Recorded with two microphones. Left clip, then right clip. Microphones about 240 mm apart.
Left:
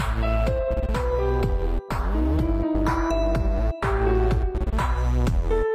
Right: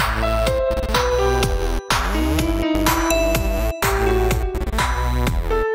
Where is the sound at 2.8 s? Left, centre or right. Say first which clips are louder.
Right 7 dB; right.